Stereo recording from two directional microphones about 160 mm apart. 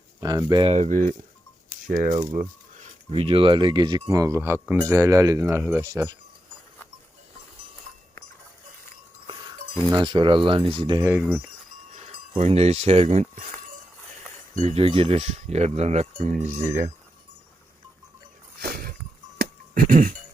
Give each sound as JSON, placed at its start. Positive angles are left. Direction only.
{"t": 0.2, "sound": "speech", "side_deg": -25}
{"t": 0.7, "sound": "speech", "side_deg": -50}
{"t": 2.3, "sound": "a sound", "side_deg": -50}
{"t": 3.1, "sound": "speech", "side_deg": -35}
{"t": 9.9, "sound": "speech", "side_deg": -30}
{"t": 12.4, "sound": "speech", "side_deg": -40}
{"t": 14.6, "sound": "speech", "side_deg": -35}
{"t": 16.1, "sound": "speech", "side_deg": -55}
{"t": 18.6, "sound": "a sound", "side_deg": -70}
{"t": 19.4, "sound": "music", "side_deg": -65}